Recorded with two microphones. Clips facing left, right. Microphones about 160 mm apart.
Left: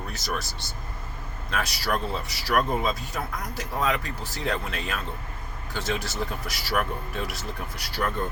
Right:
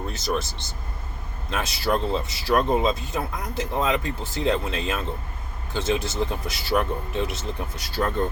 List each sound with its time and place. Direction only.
0.1 s speech: 25° right (ahead or behind)